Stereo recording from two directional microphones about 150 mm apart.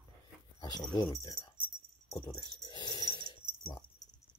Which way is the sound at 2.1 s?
30° left (ahead or behind).